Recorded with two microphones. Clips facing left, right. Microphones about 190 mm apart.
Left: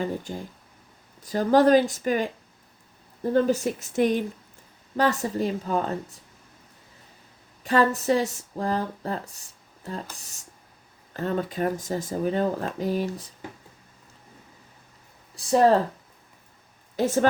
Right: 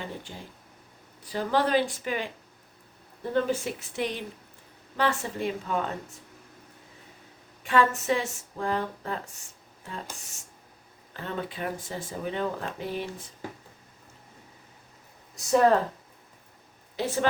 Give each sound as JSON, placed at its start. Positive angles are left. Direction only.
{"t": 0.0, "sound": "speech", "side_deg": 45}
{"t": 3.3, "sound": "speech", "side_deg": 40}
{"t": 7.6, "sound": "speech", "side_deg": 40}
{"t": 15.4, "sound": "speech", "side_deg": 30}
{"t": 17.0, "sound": "speech", "side_deg": 45}